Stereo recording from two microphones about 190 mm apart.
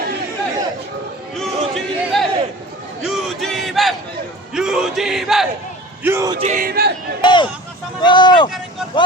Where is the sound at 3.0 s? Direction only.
Centre (ahead or behind).